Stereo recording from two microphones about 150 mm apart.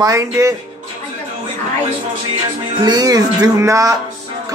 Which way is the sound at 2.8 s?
25° right (ahead or behind).